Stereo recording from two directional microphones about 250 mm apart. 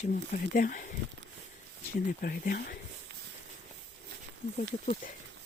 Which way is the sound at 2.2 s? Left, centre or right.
Left.